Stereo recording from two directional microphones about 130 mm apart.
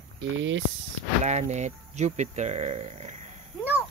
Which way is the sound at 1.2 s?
65° right (ahead or behind).